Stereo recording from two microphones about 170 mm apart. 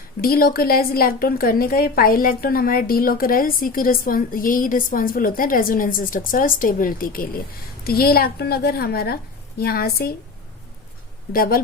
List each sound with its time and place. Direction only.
0.2 s a woman's voice: 60° left (ahead or behind)
11.3 s a woman's voice: 60° left (ahead or behind)